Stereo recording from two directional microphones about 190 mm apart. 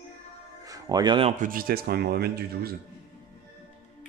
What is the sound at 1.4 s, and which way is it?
Speech, 50° right (ahead or behind).